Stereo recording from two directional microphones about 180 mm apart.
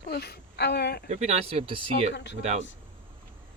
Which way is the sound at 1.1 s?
40° right (ahead or behind).